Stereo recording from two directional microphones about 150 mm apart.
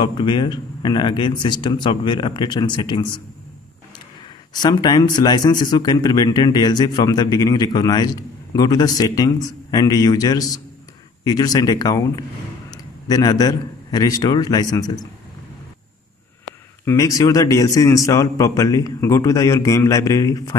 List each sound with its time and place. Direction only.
0.0 s speech: 30° left (ahead or behind)
4.6 s a man's voice: 25° left (ahead or behind)
16.8 s speech: 20° left (ahead or behind)